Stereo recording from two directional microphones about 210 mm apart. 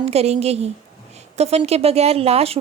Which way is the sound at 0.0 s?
30° right (ahead or behind).